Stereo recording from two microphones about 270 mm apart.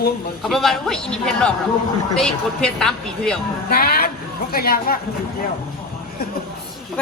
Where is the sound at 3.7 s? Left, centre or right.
Left.